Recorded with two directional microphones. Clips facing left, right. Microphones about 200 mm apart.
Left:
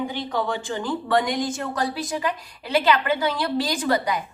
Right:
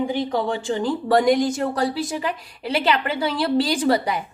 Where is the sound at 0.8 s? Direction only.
35° right (ahead or behind).